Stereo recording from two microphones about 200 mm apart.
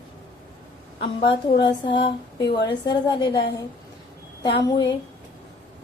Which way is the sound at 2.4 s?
60° left (ahead or behind).